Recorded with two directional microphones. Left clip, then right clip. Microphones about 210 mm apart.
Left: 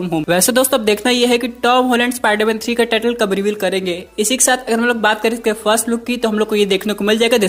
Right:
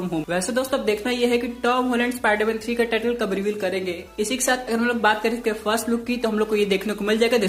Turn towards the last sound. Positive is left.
turn(degrees=40)  # may be behind; listen again after turning